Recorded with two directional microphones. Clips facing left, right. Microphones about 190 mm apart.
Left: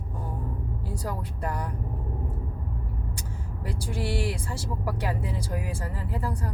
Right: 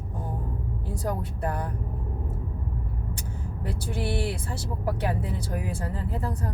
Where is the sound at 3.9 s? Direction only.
20° right (ahead or behind).